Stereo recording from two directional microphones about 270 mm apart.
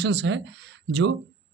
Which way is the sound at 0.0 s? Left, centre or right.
Right.